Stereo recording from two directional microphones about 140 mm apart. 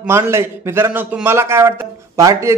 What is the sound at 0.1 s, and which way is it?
A man's voice, 20° right (ahead or behind).